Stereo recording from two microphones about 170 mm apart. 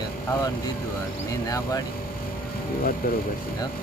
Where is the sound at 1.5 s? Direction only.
20° left (ahead or behind).